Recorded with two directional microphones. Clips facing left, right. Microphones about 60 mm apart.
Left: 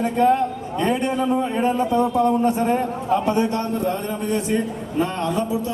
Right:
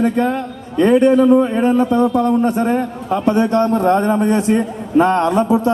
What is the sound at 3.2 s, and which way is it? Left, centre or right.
Speech, right.